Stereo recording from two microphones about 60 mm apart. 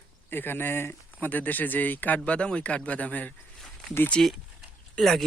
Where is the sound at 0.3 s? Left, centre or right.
Left.